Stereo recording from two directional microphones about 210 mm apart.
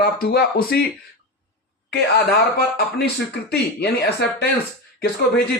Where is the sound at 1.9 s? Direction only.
50° left (ahead or behind).